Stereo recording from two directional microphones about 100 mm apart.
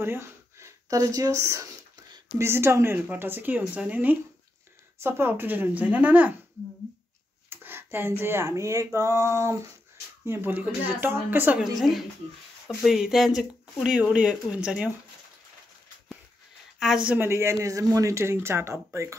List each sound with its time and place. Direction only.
0.0 s a sound: 25° right (ahead or behind)
2.4 s speech: 25° right (ahead or behind)
7.4 s a sound: 20° right (ahead or behind)
8.2 s speech: 25° right (ahead or behind)
11.8 s speech: centre (ahead or behind)
16.8 s speech: 5° right (ahead or behind)
17.1 s speech: 25° right (ahead or behind)